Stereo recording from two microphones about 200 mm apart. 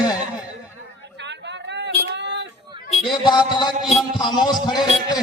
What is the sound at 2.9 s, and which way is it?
Music, 25° left (ahead or behind).